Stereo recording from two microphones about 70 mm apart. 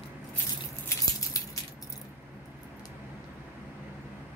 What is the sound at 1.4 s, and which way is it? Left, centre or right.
Keys jangling, left.